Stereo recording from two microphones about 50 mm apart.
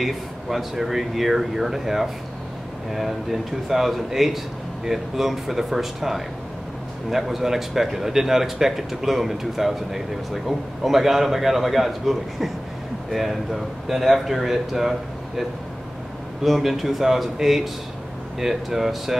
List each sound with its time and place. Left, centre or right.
0.0 s speech: centre
16.4 s speech: centre